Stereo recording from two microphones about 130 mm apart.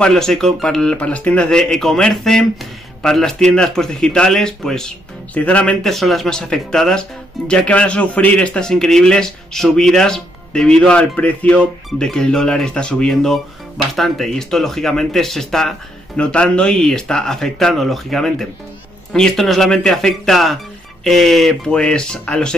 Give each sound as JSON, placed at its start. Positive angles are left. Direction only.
{"t": 0.0, "sound": "speech", "side_deg": 5}